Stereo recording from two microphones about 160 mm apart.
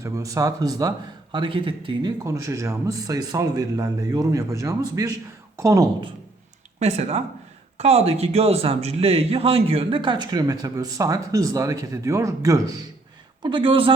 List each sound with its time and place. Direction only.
0.0 s a man's voice: 20° right (ahead or behind)
6.7 s a man's voice: 45° right (ahead or behind)